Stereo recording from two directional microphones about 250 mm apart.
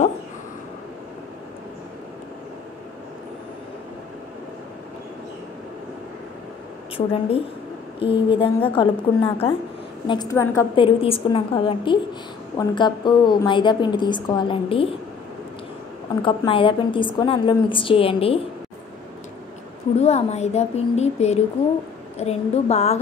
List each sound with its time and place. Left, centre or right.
7.1 s a woman's voice: left
11.0 s a woman's voice: left
16.2 s a woman's voice: left
20.0 s a woman's voice: left